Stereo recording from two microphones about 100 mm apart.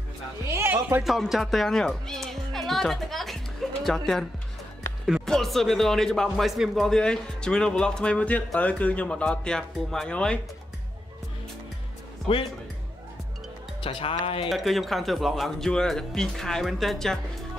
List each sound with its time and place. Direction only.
0.5 s a sound: 25° right (ahead or behind)
1.0 s speech: centre (ahead or behind)
13.8 s music: 65° left (ahead or behind)
14.2 s speech: 65° left (ahead or behind)
14.5 s speech: centre (ahead or behind)